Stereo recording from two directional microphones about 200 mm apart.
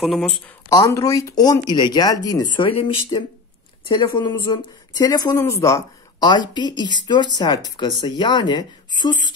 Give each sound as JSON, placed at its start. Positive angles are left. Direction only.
{"t": 0.0, "sound": "speech", "side_deg": 0}
{"t": 0.7, "sound": "speech", "side_deg": 15}